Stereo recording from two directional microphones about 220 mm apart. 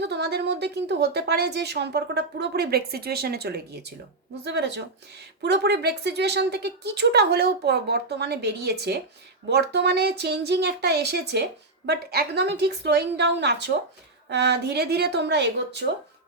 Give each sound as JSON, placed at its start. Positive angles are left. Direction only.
{"t": 0.0, "sound": "a woman's voice", "side_deg": -50}